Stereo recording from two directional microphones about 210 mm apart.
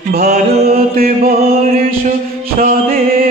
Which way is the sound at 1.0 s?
45° right (ahead or behind).